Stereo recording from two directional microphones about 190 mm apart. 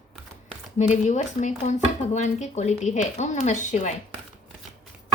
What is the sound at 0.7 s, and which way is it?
Speech, 40° left (ahead or behind).